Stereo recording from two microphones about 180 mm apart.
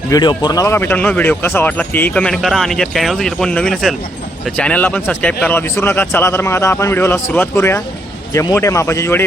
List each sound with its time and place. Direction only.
0.1 s speech: 25° left (ahead or behind)